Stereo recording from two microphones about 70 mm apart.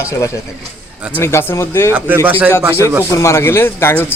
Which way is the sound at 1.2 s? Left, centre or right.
Left.